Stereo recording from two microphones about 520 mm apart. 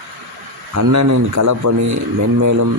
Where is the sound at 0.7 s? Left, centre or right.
Right.